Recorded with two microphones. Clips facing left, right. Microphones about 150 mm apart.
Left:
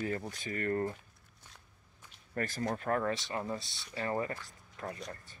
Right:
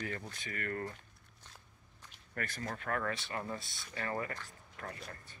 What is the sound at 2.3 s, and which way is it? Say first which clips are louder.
Speech: left 6 dB; 30° left (ahead or behind).